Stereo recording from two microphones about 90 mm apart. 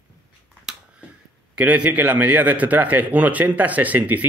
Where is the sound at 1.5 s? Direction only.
15° right (ahead or behind).